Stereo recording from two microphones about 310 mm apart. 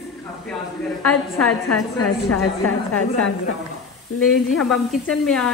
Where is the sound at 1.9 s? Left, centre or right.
Left.